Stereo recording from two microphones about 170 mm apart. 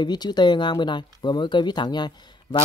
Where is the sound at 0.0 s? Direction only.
25° left (ahead or behind).